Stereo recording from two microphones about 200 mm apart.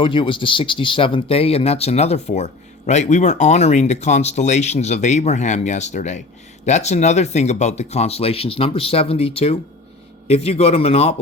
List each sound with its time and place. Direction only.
0.0 s speech: 25° left (ahead or behind)